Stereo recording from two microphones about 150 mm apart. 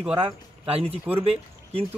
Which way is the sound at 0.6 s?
40° right (ahead or behind).